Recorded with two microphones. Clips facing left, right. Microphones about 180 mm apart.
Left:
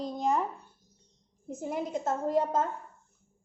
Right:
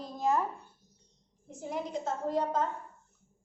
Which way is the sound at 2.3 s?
45° left (ahead or behind).